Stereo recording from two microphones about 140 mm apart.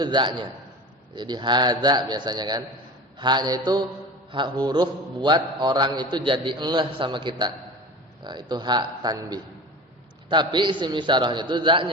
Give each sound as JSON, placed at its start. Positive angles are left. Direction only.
{"t": 0.0, "sound": "a man's voice", "side_deg": -35}